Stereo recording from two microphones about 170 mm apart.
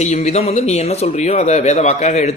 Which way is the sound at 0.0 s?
40° left (ahead or behind).